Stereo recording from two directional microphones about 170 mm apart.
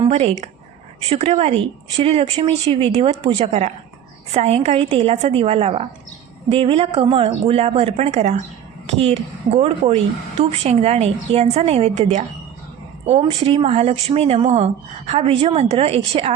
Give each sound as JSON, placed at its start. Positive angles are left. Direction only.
{"t": 0.1, "sound": "a woman's voice", "side_deg": -40}